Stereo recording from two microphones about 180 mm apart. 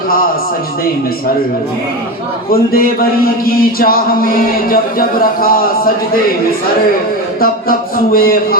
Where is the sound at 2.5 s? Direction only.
55° left (ahead or behind).